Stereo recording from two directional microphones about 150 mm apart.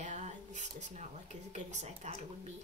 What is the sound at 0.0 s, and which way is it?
Speech, 55° right (ahead or behind).